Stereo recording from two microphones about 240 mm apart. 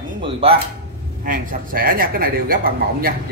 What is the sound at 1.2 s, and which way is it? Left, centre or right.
Speech, right.